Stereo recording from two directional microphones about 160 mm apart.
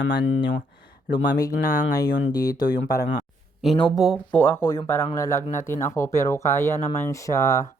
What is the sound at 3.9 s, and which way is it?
Speech, centre (ahead or behind).